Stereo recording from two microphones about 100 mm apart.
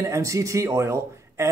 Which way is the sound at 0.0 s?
30° right (ahead or behind).